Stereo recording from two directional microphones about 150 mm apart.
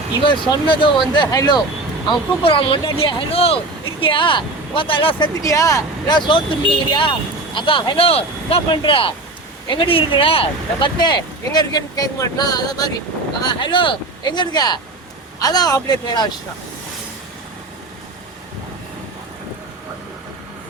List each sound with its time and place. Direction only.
0.3 s speech: 30° left (ahead or behind)
2.4 s speech: 35° left (ahead or behind)
5.4 s speech: 20° left (ahead or behind)